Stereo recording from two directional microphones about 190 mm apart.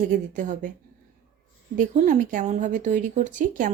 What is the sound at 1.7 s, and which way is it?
Speech, 40° right (ahead or behind).